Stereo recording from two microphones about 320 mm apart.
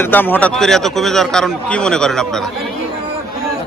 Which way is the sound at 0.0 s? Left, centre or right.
Centre.